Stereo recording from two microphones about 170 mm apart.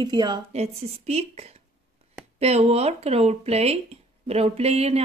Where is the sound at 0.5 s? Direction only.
40° right (ahead or behind).